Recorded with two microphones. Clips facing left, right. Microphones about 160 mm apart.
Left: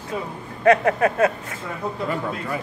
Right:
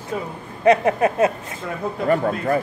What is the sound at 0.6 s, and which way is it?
Speech, 20° right (ahead or behind).